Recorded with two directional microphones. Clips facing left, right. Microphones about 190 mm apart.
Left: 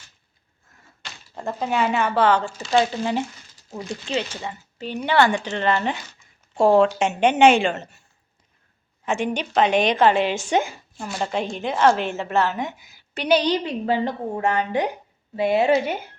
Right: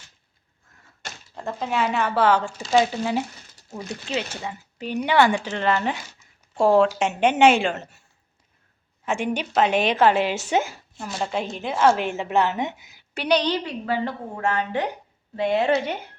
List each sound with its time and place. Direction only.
1.4 s speech: 5° left (ahead or behind)
9.0 s speech: 10° right (ahead or behind)
13.2 s a woman's voice: 10° left (ahead or behind)